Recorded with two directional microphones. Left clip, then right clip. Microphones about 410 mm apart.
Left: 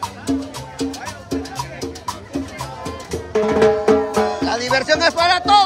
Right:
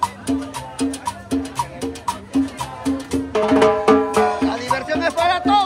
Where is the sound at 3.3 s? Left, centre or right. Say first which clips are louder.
Even; right.